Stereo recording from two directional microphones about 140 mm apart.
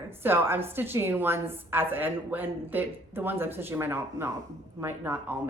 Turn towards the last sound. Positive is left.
turn(degrees=-15)  # may be behind; listen again after turning